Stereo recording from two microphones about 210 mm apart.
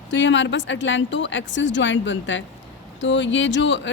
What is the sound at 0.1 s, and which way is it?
Speech, 60° left (ahead or behind).